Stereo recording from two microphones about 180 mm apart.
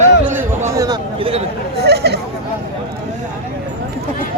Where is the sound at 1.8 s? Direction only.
65° right (ahead or behind).